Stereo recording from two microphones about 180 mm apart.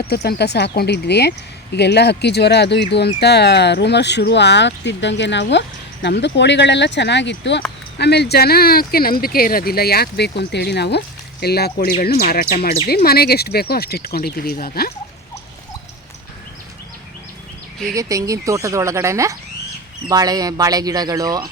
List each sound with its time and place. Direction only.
0.1 s speech: 65° left (ahead or behind)
7.9 s speech: 65° left (ahead or behind)
17.9 s speech: 20° right (ahead or behind)